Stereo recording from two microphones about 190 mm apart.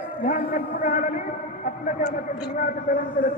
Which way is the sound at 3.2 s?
45° left (ahead or behind).